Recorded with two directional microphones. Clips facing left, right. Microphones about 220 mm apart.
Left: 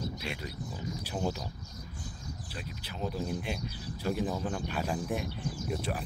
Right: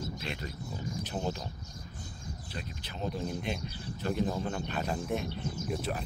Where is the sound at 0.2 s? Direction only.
10° left (ahead or behind).